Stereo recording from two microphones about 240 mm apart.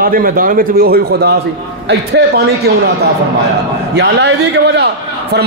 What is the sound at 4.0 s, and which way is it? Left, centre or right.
A man's voice, right.